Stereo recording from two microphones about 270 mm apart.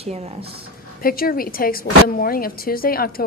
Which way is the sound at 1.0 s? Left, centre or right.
Left.